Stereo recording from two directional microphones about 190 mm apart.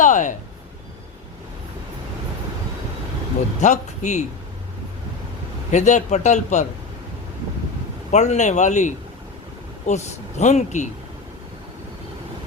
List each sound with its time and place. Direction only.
0.0 s a sound: 40° left (ahead or behind)
3.6 s speech: 40° left (ahead or behind)
5.7 s speech: 40° left (ahead or behind)
8.1 s speech: 35° left (ahead or behind)